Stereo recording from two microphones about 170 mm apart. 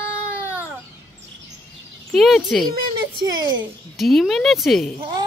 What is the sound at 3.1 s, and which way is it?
Speech, 25° right (ahead or behind).